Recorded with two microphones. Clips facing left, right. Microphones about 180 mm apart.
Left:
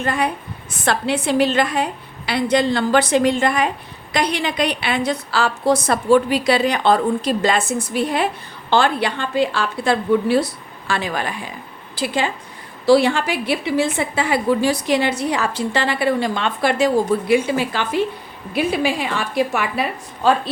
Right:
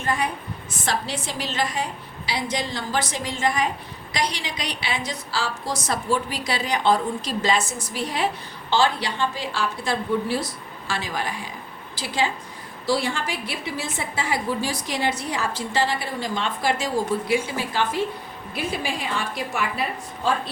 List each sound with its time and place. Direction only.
0.0 s a woman's voice: 65° left (ahead or behind)
12.8 s a woman's voice: 70° left (ahead or behind)